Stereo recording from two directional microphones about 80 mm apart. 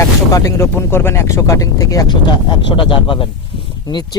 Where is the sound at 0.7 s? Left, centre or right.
Left.